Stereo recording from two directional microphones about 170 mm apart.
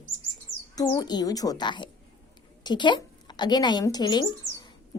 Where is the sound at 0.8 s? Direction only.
25° left (ahead or behind).